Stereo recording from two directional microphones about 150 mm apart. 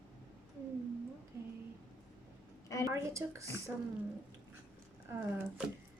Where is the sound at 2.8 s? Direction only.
20° right (ahead or behind).